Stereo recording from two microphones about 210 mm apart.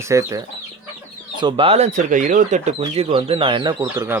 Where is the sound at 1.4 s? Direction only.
25° right (ahead or behind).